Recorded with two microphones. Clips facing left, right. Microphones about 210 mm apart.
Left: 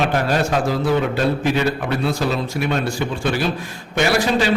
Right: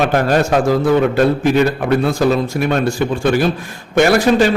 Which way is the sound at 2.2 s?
50° right (ahead or behind).